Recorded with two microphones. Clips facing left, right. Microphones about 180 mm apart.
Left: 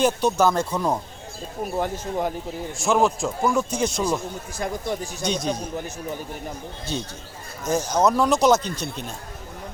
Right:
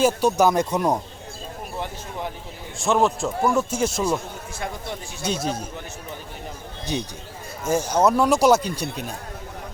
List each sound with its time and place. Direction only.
0.0 s a man's voice: 10° right (ahead or behind)
1.8 s speech: 45° left (ahead or behind)
2.8 s a man's voice: centre (ahead or behind)
5.2 s a man's voice: 5° right (ahead or behind)
6.9 s a man's voice: 10° right (ahead or behind)